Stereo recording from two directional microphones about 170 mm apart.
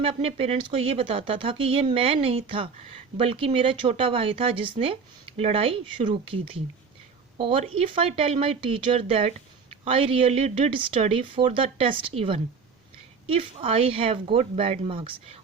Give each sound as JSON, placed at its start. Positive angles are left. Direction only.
{"t": 0.0, "sound": "speech", "side_deg": -35}